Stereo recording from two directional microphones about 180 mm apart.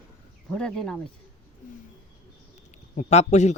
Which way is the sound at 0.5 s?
5° left (ahead or behind).